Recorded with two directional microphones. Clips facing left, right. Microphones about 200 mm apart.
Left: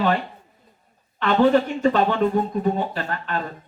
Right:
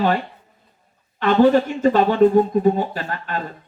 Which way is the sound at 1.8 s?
40° right (ahead or behind).